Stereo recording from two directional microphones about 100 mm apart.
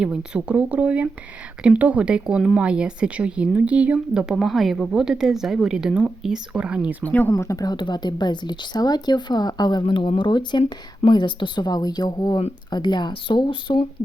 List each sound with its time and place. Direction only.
0.0 s speech: 10° right (ahead or behind)
7.0 s speech: 15° left (ahead or behind)
7.3 s a woman's voice: 35° left (ahead or behind); by 13.7 s 55° left (ahead or behind)